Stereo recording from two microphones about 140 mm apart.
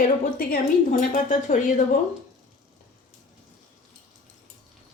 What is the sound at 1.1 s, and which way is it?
Speech, 65° left (ahead or behind).